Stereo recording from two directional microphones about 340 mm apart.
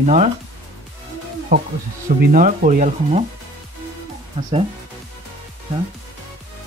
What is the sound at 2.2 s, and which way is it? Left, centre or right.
Speech, right.